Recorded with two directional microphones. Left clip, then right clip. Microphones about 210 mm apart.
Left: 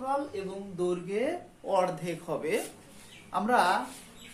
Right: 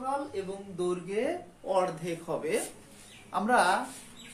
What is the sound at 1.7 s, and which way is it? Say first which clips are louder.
Speech: left 1 dB; 15° left (ahead or behind).